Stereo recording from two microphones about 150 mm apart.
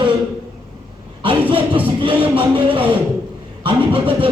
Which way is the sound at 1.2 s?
35° right (ahead or behind).